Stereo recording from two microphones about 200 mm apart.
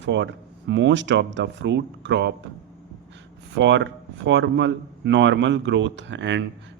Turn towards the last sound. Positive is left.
turn(degrees=-60)  # may be behind; listen again after turning